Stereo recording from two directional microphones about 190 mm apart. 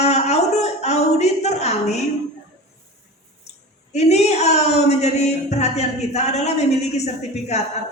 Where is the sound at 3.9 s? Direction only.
35° left (ahead or behind).